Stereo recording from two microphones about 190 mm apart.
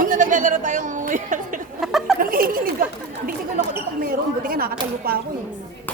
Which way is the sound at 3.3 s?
50° right (ahead or behind).